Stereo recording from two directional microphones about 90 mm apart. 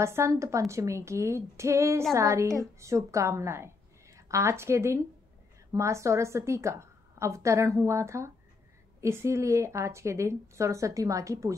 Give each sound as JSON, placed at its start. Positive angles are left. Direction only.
{"t": 0.0, "sound": "a woman's voice", "side_deg": -30}